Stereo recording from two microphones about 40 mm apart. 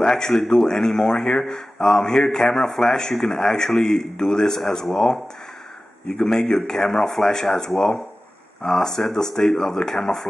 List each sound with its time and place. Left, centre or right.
0.0 s a man's voice: centre
0.7 s speech: centre